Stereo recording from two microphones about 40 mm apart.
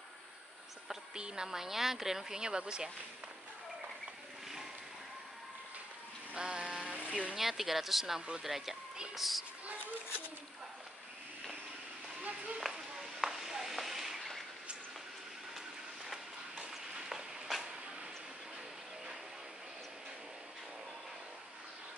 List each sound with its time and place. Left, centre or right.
1.1 s speech: right
6.3 s a sound: right
7.3 s speech: centre
12.2 s speech: right
13.0 s a sound: centre
17.5 s vehicle: centre